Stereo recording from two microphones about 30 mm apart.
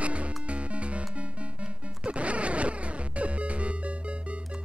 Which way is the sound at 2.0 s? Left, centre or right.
Right.